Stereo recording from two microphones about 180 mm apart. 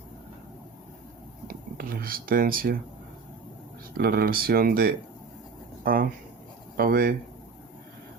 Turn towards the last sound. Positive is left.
turn(degrees=-55)  # may be behind; listen again after turning